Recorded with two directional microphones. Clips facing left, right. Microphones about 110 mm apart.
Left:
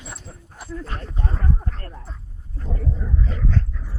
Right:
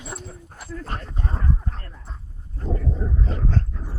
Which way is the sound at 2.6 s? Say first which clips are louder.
Right 2 dB; 30° right (ahead or behind).